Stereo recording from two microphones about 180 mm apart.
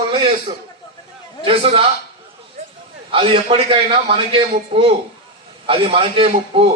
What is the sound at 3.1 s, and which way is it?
A man's voice, 30° right (ahead or behind).